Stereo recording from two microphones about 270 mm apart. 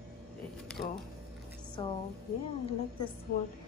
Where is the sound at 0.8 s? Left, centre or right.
Left.